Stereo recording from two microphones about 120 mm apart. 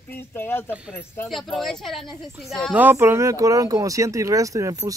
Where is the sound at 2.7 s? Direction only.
15° right (ahead or behind).